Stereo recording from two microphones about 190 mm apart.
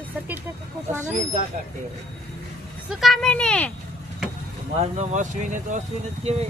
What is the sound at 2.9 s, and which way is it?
Speech, centre (ahead or behind).